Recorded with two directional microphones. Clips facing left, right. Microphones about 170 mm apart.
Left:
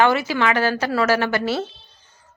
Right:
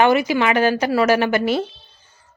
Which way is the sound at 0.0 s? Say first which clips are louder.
Right 2 dB; 15° right (ahead or behind).